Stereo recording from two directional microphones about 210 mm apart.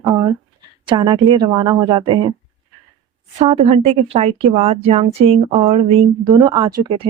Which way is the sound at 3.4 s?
30° right (ahead or behind).